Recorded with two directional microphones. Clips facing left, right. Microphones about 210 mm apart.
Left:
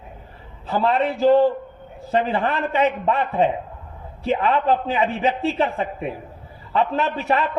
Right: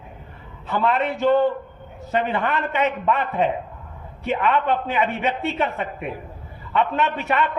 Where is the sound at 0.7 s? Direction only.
35° left (ahead or behind).